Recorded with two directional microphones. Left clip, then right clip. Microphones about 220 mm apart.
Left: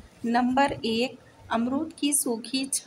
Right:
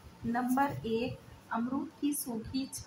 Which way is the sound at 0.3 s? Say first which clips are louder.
Left 8 dB; 45° left (ahead or behind).